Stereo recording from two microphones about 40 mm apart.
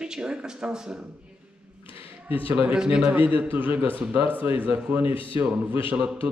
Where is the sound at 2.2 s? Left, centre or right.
Right.